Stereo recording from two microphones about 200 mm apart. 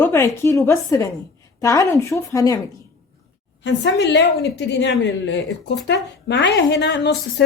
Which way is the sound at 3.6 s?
60° left (ahead or behind).